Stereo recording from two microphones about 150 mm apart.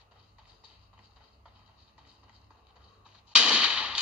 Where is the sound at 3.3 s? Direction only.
5° right (ahead or behind).